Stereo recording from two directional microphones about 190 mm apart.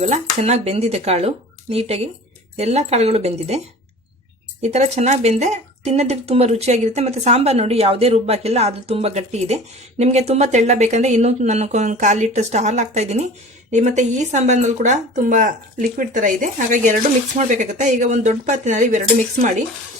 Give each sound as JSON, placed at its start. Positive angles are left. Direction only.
{"t": 0.0, "sound": "speech", "side_deg": -35}
{"t": 4.6, "sound": "speech", "side_deg": -35}